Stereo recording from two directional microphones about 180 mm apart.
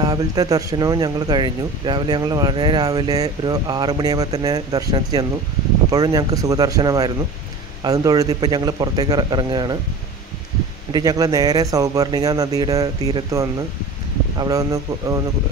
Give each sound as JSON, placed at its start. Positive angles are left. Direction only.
{"t": 0.0, "sound": "speech", "side_deg": -20}
{"t": 10.9, "sound": "speech", "side_deg": -20}